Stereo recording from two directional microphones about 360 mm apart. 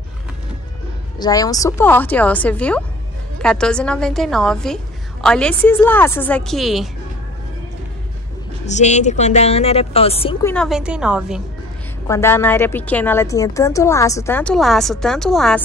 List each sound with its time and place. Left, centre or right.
1.2 s a woman's voice: centre
8.6 s a woman's voice: centre
10.5 s a woman's voice: centre